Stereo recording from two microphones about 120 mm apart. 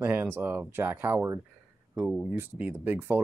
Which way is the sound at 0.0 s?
15° right (ahead or behind).